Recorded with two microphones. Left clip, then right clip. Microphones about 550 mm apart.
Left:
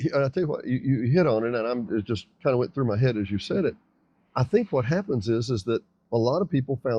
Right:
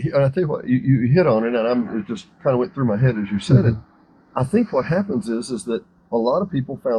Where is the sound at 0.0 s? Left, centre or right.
Left.